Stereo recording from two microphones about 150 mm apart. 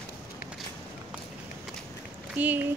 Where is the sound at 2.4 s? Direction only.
10° right (ahead or behind).